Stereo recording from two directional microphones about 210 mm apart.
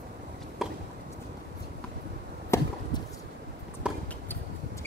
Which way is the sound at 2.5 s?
10° left (ahead or behind).